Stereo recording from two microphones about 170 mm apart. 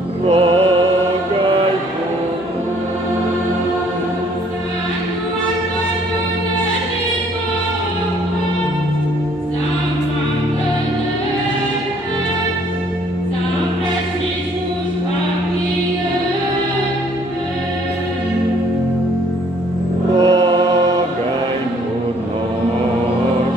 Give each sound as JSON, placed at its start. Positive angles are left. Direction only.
{"t": 0.3, "sound": "music", "side_deg": -35}
{"t": 20.2, "sound": "choir", "side_deg": -20}